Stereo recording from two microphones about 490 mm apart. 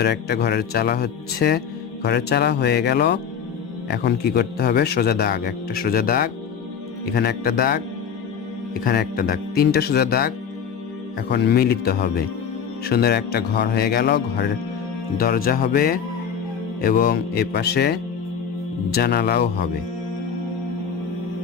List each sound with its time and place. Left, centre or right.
0.0 s speech: centre
8.8 s speech: centre